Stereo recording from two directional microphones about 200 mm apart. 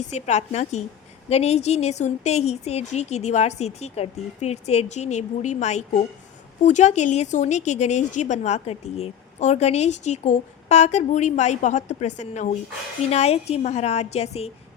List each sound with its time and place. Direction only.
0.1 s a woman's voice: 35° left (ahead or behind)